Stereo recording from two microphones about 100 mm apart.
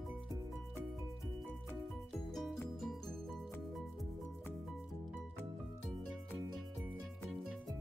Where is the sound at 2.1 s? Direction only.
5° left (ahead or behind).